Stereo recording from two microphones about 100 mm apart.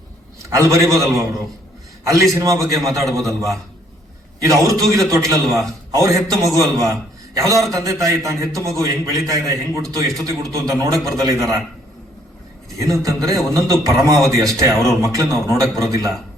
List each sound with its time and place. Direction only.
0.5 s a man's voice: 30° right (ahead or behind)
2.3 s a man's voice: 35° right (ahead or behind)
12.8 s a man's voice: 35° right (ahead or behind)